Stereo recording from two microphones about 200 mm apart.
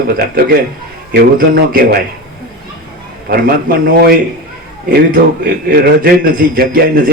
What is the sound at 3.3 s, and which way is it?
Speech, 45° right (ahead or behind).